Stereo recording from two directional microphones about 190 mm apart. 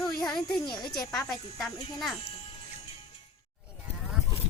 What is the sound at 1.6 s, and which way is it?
Speech, centre (ahead or behind).